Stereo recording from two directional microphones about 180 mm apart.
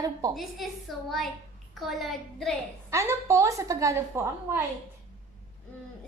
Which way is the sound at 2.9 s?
15° right (ahead or behind).